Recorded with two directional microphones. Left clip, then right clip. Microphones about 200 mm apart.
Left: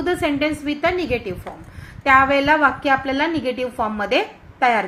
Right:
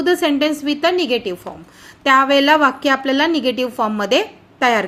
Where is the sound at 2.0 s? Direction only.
55° right (ahead or behind).